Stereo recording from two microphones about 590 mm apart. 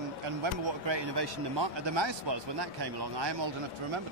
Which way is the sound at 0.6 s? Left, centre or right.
Right.